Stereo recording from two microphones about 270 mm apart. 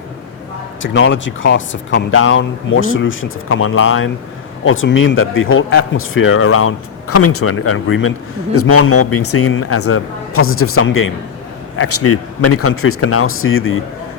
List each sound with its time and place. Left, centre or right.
0.8 s speech: left